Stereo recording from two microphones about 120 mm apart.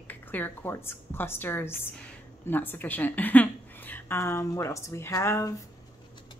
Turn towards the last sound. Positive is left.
turn(degrees=25)  # may be behind; listen again after turning